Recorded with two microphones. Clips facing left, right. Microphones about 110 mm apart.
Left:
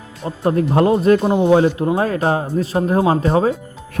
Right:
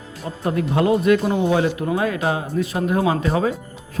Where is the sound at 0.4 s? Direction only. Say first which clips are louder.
Left 4 dB; 35° left (ahead or behind).